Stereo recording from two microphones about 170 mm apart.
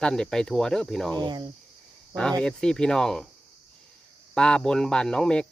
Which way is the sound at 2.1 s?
5° left (ahead or behind).